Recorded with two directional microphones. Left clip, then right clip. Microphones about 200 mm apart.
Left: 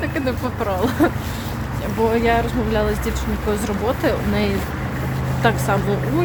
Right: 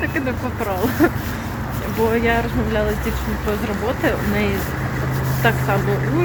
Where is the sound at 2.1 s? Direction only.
15° left (ahead or behind).